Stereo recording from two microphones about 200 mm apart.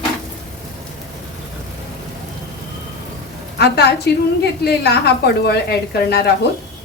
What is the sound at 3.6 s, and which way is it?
A woman's voice, 55° left (ahead or behind).